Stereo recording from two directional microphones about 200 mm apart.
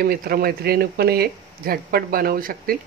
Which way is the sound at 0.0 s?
50° right (ahead or behind).